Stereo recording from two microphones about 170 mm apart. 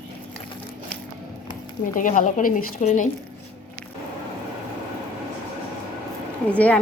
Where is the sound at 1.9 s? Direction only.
50° left (ahead or behind).